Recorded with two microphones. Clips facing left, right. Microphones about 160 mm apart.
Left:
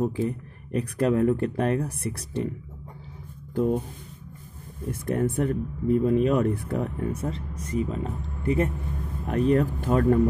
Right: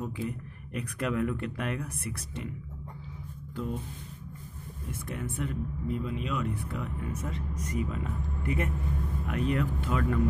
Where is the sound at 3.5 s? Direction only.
50° left (ahead or behind).